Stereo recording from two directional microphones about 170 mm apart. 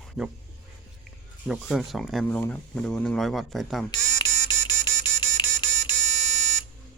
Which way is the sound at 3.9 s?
25° left (ahead or behind).